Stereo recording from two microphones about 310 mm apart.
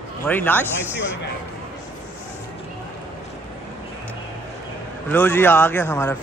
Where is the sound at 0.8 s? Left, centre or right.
Centre.